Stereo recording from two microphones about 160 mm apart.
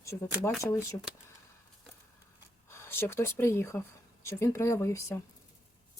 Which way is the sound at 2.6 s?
15° left (ahead or behind).